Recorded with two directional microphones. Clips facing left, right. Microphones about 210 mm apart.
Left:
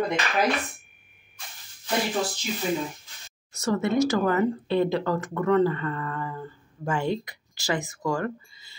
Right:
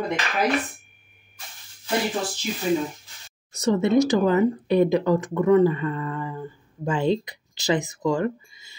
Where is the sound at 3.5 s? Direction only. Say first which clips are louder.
Right 5 dB; 20° right (ahead or behind).